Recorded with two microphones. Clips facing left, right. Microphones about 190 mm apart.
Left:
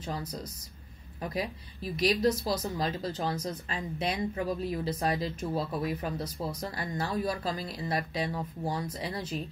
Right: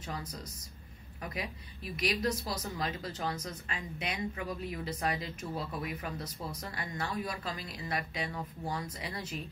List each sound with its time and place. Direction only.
1.2 s speech: 35° left (ahead or behind)